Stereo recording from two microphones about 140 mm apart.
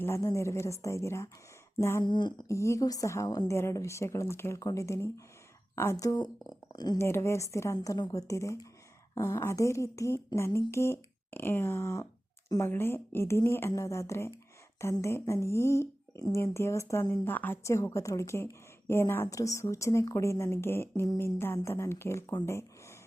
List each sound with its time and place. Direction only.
0.0 s a woman's voice: 20° left (ahead or behind)
2.0 s speech: 35° left (ahead or behind)
2.5 s a woman's voice: 20° left (ahead or behind)
7.0 s a woman's voice: 20° left (ahead or behind)